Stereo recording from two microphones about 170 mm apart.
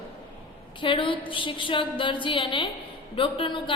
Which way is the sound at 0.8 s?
30° left (ahead or behind).